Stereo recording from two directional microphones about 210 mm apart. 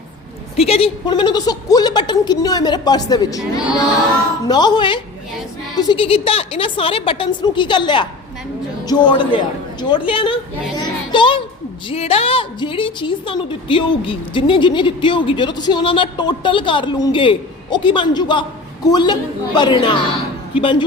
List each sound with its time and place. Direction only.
0.5 s a woman's voice: 30° left (ahead or behind)
4.4 s a woman's voice: 20° left (ahead or behind)
11.1 s a sound: 25° left (ahead or behind)
11.9 s a woman's voice: 25° left (ahead or behind)